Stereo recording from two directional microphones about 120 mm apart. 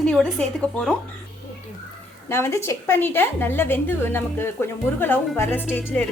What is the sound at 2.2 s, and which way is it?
A woman's voice, 20° left (ahead or behind).